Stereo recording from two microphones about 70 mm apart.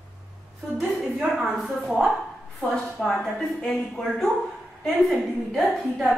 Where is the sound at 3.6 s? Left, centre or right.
Centre.